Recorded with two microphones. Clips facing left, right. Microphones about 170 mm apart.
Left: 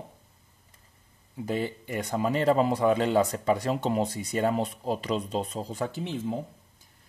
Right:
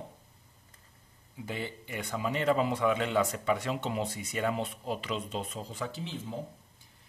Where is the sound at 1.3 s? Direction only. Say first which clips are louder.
Left 8 dB; 40° left (ahead or behind).